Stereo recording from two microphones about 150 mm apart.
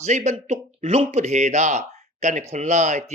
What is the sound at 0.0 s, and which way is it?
Speech, 50° right (ahead or behind).